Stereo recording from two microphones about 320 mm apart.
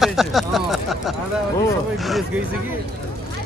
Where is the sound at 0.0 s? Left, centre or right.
Centre.